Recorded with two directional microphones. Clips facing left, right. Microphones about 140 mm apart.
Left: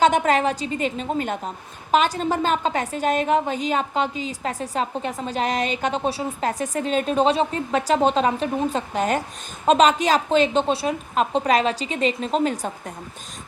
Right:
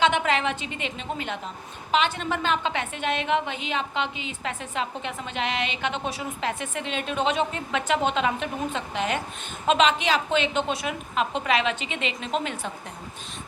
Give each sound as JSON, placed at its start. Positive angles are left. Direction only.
{"t": 0.0, "sound": "a woman's voice", "side_deg": 40}